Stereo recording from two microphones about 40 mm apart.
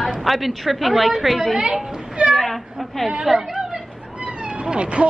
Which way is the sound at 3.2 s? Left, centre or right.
Centre.